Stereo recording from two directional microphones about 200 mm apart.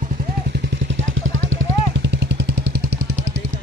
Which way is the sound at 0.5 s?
55° right (ahead or behind).